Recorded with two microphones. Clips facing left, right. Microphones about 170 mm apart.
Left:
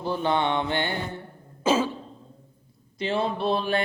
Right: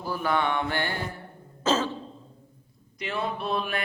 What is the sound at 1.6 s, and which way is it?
Cough, 10° left (ahead or behind).